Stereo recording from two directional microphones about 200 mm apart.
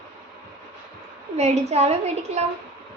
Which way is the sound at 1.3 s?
35° right (ahead or behind).